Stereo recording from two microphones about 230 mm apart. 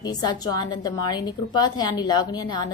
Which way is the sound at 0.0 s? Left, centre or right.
Centre.